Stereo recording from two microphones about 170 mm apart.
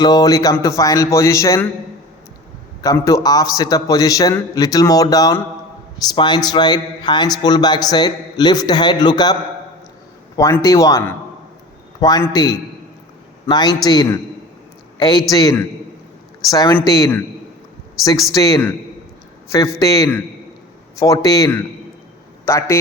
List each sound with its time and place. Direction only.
0.0 s a man's voice: 25° left (ahead or behind)
2.8 s a man's voice: 20° left (ahead or behind)